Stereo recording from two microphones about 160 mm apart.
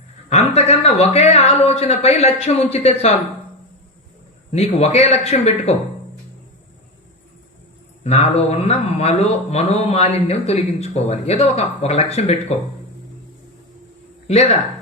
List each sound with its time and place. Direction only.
0.3 s a man's voice: 45° left (ahead or behind)
4.5 s a man's voice: 40° left (ahead or behind)
8.0 s a man's voice: 40° left (ahead or behind)
14.3 s speech: 40° left (ahead or behind)